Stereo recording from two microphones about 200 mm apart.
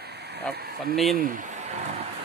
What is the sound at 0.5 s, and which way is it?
Speech, 50° right (ahead or behind).